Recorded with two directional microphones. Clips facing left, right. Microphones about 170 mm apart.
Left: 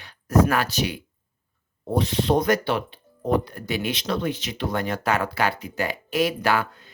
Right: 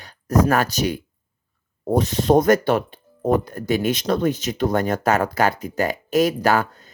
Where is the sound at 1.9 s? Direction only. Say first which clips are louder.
Right 4 dB; 45° right (ahead or behind).